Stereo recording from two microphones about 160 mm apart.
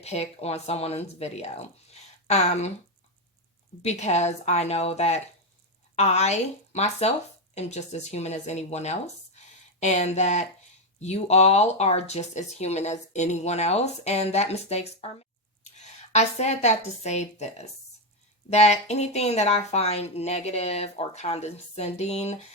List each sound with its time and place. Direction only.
0.0 s speech: 40° left (ahead or behind)
3.8 s a woman's voice: 45° left (ahead or behind)